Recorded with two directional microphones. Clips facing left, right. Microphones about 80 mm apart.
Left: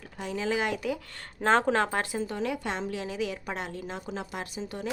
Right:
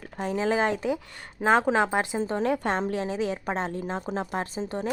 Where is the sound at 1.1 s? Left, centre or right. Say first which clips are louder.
Right 1 dB; centre.